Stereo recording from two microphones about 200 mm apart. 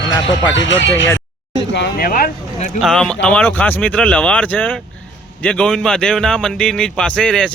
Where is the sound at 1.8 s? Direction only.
50° left (ahead or behind).